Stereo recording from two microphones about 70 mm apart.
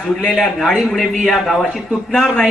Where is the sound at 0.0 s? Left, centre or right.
Centre.